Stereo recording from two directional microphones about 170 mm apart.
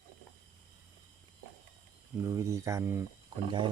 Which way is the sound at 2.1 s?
20° right (ahead or behind).